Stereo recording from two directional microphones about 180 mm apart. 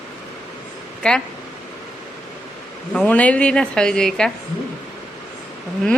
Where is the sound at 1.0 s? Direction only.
5° left (ahead or behind).